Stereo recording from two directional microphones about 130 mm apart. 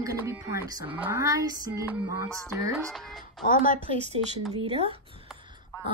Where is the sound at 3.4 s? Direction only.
90° left.